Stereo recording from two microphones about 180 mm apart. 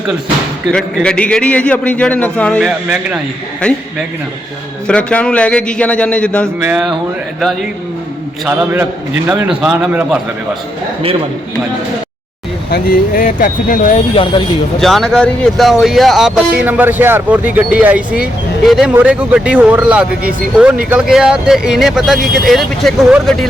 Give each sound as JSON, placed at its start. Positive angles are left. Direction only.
{"t": 0.7, "sound": "a man's voice", "side_deg": 5}
{"t": 4.9, "sound": "speech", "side_deg": 5}
{"t": 8.4, "sound": "speech", "side_deg": -10}
{"t": 12.7, "sound": "speech", "side_deg": 50}
{"t": 14.1, "sound": "speech", "side_deg": 30}
{"t": 14.8, "sound": "speech", "side_deg": 0}